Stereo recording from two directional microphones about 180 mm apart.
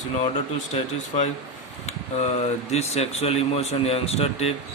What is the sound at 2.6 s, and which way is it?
A man's voice, 35° left (ahead or behind).